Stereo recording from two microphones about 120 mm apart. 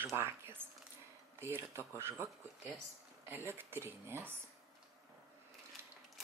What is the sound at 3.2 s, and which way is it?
Speech, 20° right (ahead or behind).